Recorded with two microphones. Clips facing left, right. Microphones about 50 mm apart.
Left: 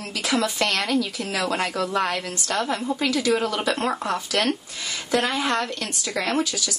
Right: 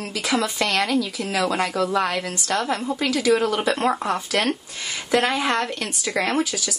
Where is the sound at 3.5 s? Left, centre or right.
Centre.